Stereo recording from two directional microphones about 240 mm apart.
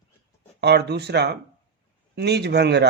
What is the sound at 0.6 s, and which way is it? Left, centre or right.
Speech, right.